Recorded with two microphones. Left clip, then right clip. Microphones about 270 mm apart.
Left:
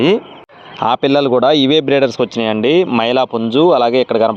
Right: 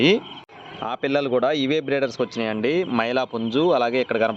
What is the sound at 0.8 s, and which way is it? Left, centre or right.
A man's voice, left.